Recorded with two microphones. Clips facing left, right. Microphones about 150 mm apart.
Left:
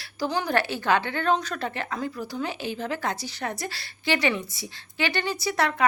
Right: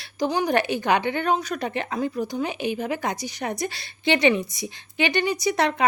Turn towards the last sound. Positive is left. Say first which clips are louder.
# right 2 dB
turn(degrees=-20)  # may be behind; listen again after turning